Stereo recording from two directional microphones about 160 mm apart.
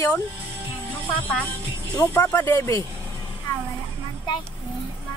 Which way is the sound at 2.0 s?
15° left (ahead or behind).